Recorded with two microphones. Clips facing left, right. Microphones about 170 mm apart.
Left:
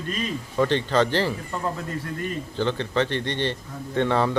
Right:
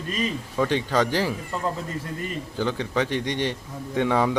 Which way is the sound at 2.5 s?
10° right (ahead or behind).